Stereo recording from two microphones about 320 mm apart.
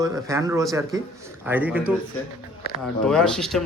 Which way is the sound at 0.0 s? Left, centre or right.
Centre.